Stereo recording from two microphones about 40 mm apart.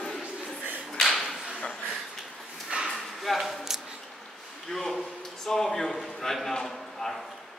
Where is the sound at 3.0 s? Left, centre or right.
Centre.